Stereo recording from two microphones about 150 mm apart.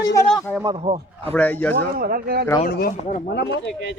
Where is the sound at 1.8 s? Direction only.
75° right (ahead or behind).